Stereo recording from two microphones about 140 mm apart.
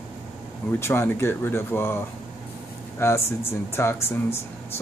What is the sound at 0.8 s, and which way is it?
Speech, 20° left (ahead or behind).